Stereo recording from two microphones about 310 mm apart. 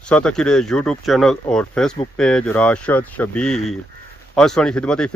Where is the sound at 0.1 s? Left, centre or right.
Centre.